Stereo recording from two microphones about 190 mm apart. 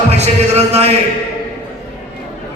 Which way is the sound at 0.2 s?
35° right (ahead or behind).